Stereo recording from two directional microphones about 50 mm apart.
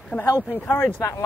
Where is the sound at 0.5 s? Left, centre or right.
Left.